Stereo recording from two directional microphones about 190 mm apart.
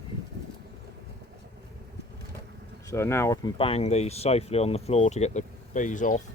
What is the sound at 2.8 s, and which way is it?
Speech, 15° left (ahead or behind).